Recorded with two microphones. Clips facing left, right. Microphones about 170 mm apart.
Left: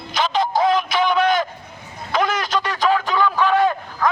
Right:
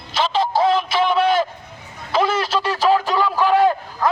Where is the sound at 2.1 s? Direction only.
30° right (ahead or behind).